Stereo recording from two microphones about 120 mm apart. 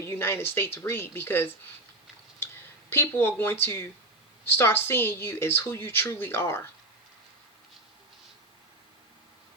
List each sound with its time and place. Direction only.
0.0 s speech: 20° left (ahead or behind)
2.9 s speech: 20° left (ahead or behind)